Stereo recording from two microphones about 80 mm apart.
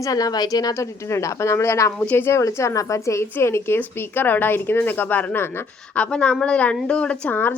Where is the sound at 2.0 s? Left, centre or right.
Left.